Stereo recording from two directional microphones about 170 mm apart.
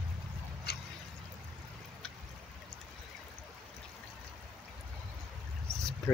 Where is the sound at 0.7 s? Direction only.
70° left (ahead or behind).